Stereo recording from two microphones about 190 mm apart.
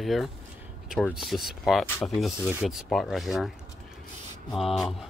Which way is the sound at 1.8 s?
10° left (ahead or behind).